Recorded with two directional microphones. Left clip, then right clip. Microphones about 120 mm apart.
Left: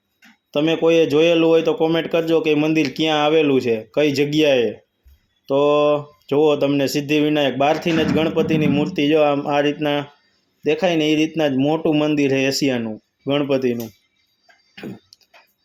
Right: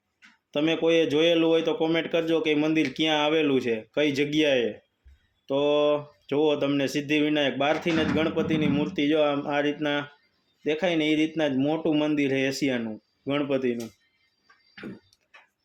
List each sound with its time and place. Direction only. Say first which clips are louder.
0.5 s speech: left 7 dB; 20° left (ahead or behind)
14.8 s music: left 7 dB; 20° left (ahead or behind)